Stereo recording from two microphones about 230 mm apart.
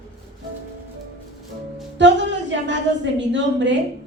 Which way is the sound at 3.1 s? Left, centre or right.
Right.